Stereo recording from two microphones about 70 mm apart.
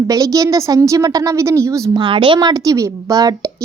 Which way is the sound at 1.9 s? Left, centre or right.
Right.